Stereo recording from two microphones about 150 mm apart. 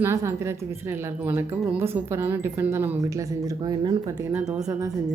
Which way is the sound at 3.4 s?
30° right (ahead or behind).